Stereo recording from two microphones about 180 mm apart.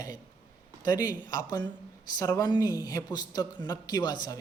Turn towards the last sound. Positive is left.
turn(degrees=25)  # may be behind; listen again after turning